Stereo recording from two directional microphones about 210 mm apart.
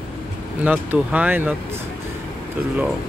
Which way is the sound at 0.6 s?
5° right (ahead or behind).